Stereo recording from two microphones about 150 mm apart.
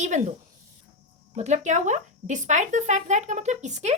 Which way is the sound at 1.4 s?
50° right (ahead or behind).